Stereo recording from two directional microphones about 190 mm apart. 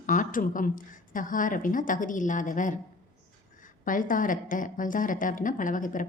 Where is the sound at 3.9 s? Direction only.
45° left (ahead or behind).